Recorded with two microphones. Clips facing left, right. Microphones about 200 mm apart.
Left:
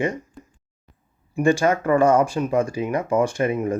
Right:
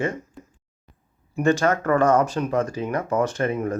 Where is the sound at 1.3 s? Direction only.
10° left (ahead or behind).